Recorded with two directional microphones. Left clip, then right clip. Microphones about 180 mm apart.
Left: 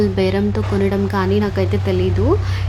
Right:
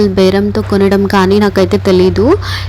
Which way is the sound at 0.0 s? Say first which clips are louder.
Right 8 dB; 35° right (ahead or behind).